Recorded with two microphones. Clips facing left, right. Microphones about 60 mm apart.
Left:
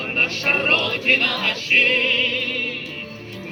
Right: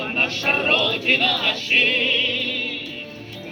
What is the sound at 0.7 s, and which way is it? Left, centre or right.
Choir, left.